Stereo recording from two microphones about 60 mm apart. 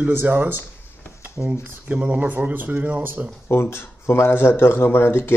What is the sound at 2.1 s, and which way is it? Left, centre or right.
Speech, right.